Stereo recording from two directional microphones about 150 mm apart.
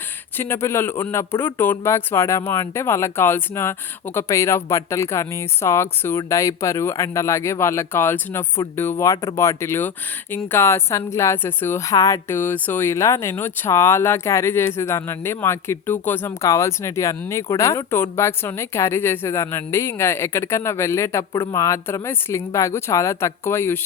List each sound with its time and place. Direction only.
0.3 s speech: 15° left (ahead or behind)